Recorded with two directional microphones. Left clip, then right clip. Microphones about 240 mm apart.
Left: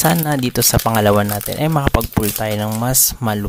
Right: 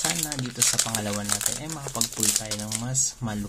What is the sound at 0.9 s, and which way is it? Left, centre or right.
Speech, left.